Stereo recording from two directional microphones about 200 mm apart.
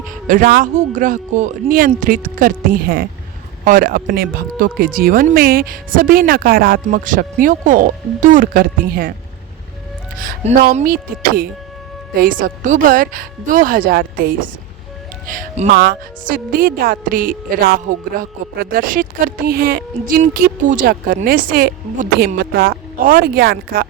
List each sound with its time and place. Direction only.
0.0 s a man's voice: 40° right (ahead or behind)
10.2 s speech: 45° right (ahead or behind)
15.7 s speech: 50° right (ahead or behind)